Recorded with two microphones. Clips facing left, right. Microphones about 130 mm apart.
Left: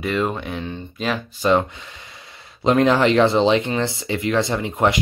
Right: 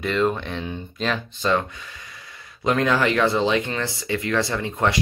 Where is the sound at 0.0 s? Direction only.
5° left (ahead or behind).